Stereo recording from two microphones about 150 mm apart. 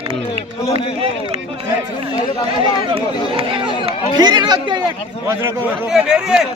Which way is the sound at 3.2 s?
35° right (ahead or behind).